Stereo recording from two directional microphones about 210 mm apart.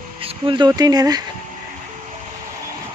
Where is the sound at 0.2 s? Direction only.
25° right (ahead or behind).